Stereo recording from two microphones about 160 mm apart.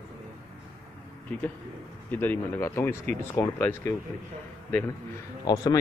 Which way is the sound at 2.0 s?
10° left (ahead or behind).